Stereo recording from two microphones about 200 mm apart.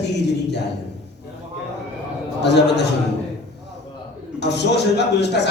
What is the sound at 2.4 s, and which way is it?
Speech, 55° left (ahead or behind).